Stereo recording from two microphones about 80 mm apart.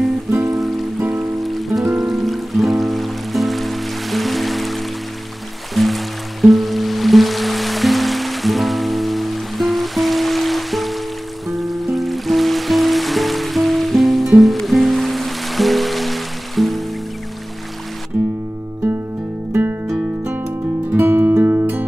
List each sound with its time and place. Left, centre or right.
0.5 s music: centre
0.9 s music: right
1.4 s music: centre
18.1 s music: right
20.9 s music: right